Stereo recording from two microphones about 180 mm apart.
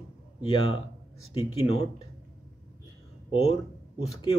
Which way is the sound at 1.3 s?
30° left (ahead or behind).